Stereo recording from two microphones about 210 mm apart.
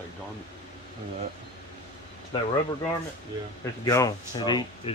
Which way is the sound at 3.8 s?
15° left (ahead or behind).